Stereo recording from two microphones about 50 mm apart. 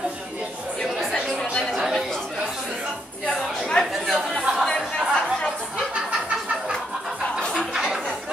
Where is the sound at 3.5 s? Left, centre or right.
Centre.